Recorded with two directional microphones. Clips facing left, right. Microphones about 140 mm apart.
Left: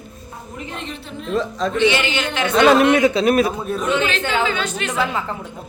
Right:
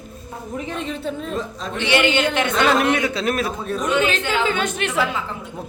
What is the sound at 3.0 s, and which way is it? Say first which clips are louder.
Speech: left 7 dB; 20° left (ahead or behind).